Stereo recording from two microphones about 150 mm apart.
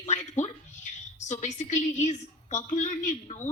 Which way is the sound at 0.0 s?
50° left (ahead or behind).